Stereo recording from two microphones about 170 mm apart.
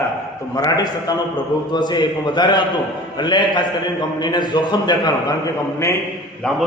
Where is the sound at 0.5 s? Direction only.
20° left (ahead or behind).